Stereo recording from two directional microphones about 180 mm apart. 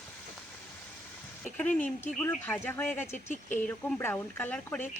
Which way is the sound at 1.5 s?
10° left (ahead or behind).